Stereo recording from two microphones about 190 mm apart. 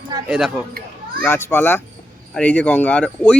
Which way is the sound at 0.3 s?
Centre (ahead or behind).